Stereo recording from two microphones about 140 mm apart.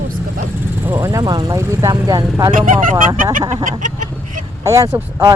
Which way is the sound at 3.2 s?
70° right (ahead or behind).